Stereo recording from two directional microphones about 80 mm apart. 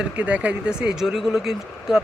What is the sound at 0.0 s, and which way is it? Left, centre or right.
Speech, centre.